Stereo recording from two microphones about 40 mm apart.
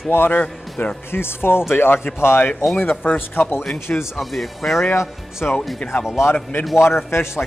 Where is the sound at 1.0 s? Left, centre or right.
Left.